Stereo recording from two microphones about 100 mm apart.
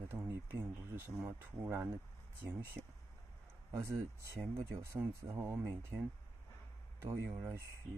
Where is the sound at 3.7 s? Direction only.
30° right (ahead or behind).